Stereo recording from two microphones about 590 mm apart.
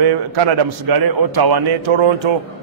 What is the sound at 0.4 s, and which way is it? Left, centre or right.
A man's voice, right.